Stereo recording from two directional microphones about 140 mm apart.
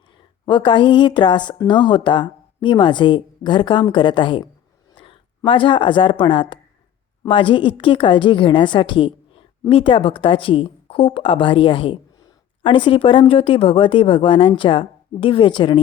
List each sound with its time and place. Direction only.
0.4 s a woman's voice: 35° left (ahead or behind)
4.9 s a sound: 40° left (ahead or behind)
5.5 s a woman's voice: 35° left (ahead or behind)